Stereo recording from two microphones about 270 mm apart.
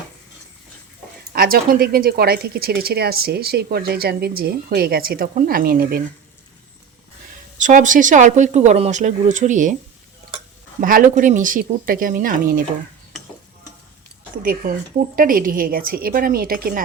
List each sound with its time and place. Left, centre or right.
1.3 s speech: right
7.6 s speech: right
10.8 s speech: right
14.6 s speech: right